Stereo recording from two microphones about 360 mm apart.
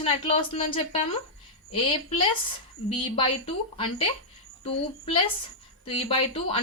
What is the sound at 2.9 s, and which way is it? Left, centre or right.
A woman's voice, centre.